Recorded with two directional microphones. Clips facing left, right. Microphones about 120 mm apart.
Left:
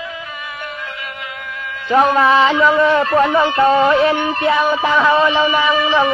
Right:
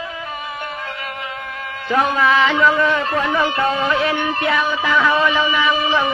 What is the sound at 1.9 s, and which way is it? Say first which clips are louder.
Music: left 4 dB; 30° left (ahead or behind).